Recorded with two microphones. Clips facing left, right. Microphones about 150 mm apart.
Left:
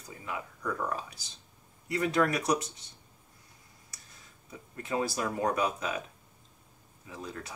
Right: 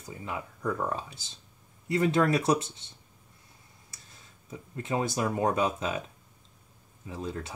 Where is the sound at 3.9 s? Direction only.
25° right (ahead or behind).